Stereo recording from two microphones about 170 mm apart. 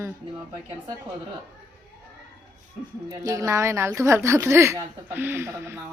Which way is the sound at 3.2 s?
20° right (ahead or behind).